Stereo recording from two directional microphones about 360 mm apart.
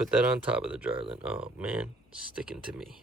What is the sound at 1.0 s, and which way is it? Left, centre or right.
Speech, centre.